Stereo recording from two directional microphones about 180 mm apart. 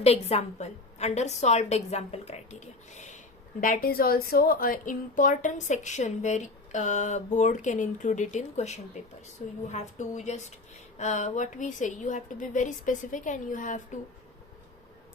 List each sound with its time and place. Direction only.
0.0 s a woman's voice: 35° left (ahead or behind)
3.6 s a woman's voice: 50° left (ahead or behind)